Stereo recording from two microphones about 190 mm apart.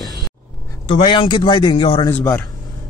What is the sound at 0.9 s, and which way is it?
Speech, 25° left (ahead or behind).